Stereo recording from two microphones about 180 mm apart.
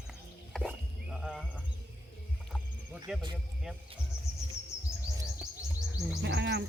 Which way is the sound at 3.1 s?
Centre (ahead or behind).